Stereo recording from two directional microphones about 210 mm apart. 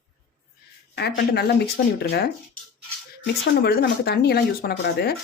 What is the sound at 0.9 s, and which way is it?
Speech, 50° left (ahead or behind).